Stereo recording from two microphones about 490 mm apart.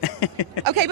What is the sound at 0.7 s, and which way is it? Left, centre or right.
Speech, right.